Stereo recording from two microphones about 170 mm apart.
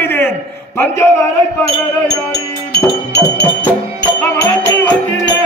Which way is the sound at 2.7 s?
75° left (ahead or behind).